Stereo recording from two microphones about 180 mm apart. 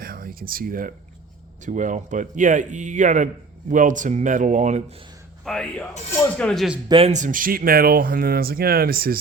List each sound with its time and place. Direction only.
0.0 s a sound: 55° right (ahead or behind)
1.6 s speech: 45° right (ahead or behind)
5.5 s speech: 5° left (ahead or behind)
6.8 s speech: 30° right (ahead or behind)
7.1 s speech: 45° right (ahead or behind)